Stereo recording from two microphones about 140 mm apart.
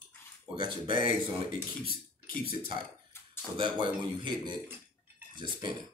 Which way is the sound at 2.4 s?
35° right (ahead or behind).